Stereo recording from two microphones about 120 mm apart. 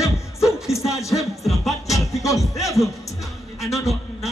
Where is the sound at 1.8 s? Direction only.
25° left (ahead or behind).